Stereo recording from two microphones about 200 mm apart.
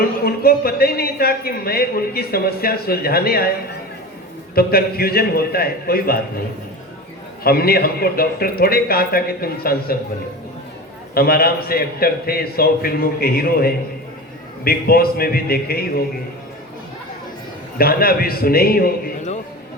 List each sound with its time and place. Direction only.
0.3 s a man's voice: 50° left (ahead or behind)
4.5 s a man's voice: 50° left (ahead or behind)
7.4 s a man's voice: 50° left (ahead or behind)
11.1 s a man's voice: 50° left (ahead or behind)
17.7 s a man's voice: 50° left (ahead or behind)